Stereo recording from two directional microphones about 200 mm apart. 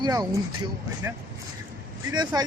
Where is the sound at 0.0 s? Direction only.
15° right (ahead or behind).